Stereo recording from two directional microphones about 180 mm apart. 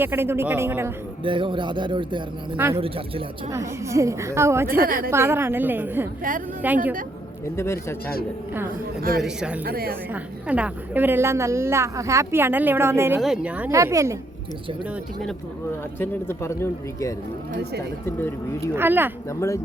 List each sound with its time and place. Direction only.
0.0 s a woman's voice: 10° right (ahead or behind)
1.2 s speech: 30° right (ahead or behind)
3.5 s a woman's voice: 15° right (ahead or behind)
4.8 s a woman's voice: 50° right (ahead or behind)
5.1 s a woman's voice: 15° right (ahead or behind)
7.5 s speech: 15° left (ahead or behind)
9.0 s speech: 55° right (ahead or behind)
9.2 s a woman's voice: 5° right (ahead or behind)
9.6 s speech: 55° right (ahead or behind)
10.1 s a woman's voice: 5° right (ahead or behind)
16.0 s speech: 15° left (ahead or behind)
17.5 s speech: 65° right (ahead or behind)
18.0 s speech: 15° left (ahead or behind)
18.7 s a woman's voice: 10° right (ahead or behind)